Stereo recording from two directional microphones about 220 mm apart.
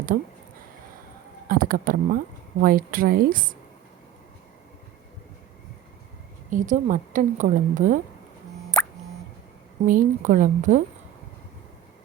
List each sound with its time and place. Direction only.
1.5 s a woman's voice: 40° right (ahead or behind)
6.5 s a woman's voice: 35° right (ahead or behind)
8.8 s plop: 5° left (ahead or behind)
9.8 s a woman's voice: 40° right (ahead or behind)